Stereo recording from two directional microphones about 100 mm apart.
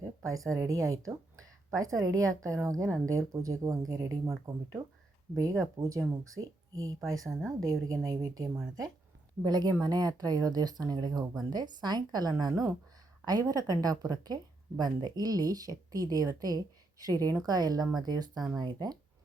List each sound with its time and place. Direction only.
0.2 s speech: 30° right (ahead or behind)